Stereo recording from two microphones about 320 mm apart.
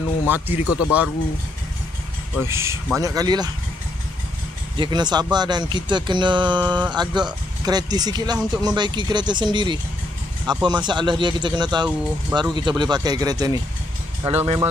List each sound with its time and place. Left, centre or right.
0.3 s speech: centre
2.4 s speech: centre
4.7 s speech: centre